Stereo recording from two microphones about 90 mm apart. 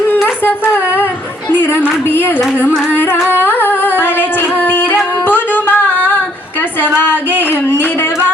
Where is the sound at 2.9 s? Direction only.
20° left (ahead or behind).